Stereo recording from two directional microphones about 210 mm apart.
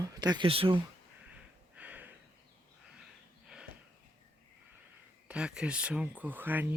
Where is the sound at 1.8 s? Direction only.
5° right (ahead or behind).